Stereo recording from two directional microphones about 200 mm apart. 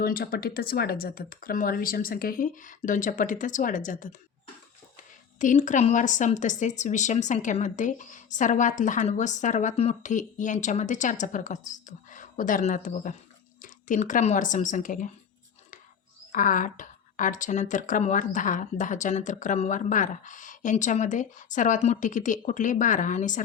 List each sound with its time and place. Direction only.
0.0 s speech: 50° left (ahead or behind)
5.4 s speech: 40° left (ahead or behind)
16.3 s speech: 40° left (ahead or behind)